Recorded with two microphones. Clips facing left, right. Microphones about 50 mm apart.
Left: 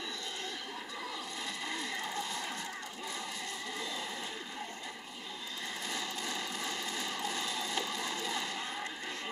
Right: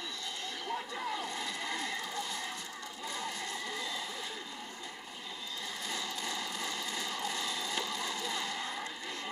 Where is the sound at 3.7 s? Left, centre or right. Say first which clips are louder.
Right 1 dB; left.